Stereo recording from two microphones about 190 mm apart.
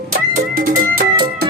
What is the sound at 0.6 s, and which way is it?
Music, 50° right (ahead or behind).